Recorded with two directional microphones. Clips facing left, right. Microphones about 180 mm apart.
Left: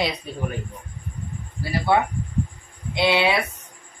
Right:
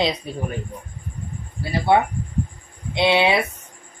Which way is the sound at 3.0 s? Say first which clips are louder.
Right 2 dB; 25° right (ahead or behind).